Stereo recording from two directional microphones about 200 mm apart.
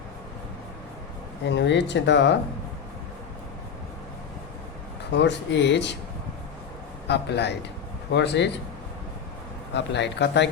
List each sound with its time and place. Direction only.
1.5 s speech: 60° left (ahead or behind)
5.1 s speech: 60° left (ahead or behind)
7.1 s speech: 55° left (ahead or behind)
9.7 s speech: 60° left (ahead or behind)